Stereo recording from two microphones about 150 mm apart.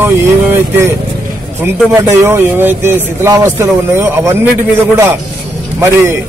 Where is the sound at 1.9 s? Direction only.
15° right (ahead or behind).